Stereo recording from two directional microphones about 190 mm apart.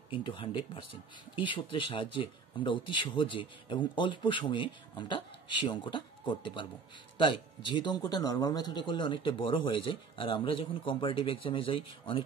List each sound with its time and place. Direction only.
0.1 s a man's voice: 25° left (ahead or behind)